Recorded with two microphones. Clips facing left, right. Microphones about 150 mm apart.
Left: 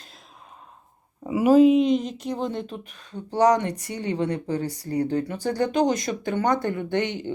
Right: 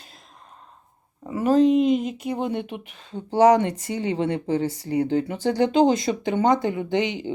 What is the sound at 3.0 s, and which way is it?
Speech, 25° right (ahead or behind).